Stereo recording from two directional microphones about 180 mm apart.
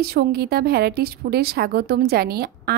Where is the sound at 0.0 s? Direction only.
60° right (ahead or behind).